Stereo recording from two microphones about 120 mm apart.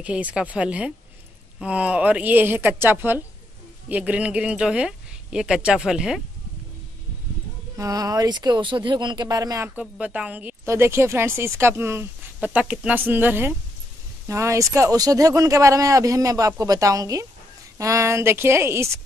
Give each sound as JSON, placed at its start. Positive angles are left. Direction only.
{"t": 0.0, "sound": "speech", "side_deg": -10}
{"t": 7.7, "sound": "speech", "side_deg": -30}
{"t": 9.8, "sound": "speech", "side_deg": -10}